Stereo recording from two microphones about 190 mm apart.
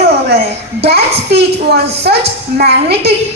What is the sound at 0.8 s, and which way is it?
A woman's voice, 60° right (ahead or behind).